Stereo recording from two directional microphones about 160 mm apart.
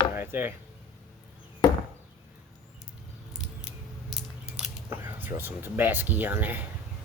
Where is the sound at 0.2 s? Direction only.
15° right (ahead or behind).